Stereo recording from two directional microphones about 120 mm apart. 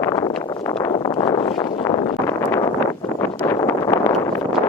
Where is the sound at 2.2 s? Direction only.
20° left (ahead or behind).